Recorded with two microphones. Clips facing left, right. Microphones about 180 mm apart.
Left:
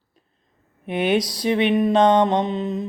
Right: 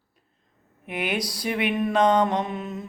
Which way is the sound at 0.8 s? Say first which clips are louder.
Left 8 dB; 25° left (ahead or behind).